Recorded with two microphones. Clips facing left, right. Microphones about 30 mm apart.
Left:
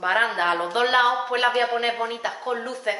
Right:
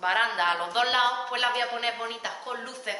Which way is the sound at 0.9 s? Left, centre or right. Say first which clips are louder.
Left 5 dB; centre.